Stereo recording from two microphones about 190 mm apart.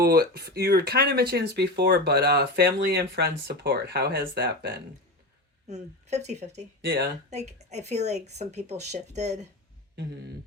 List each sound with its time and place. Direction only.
0.0 s speech: 55° right (ahead or behind)
5.6 s speech: 35° right (ahead or behind)